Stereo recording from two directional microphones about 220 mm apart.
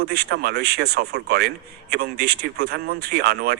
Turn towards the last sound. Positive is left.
turn(degrees=-45)  # may be behind; listen again after turning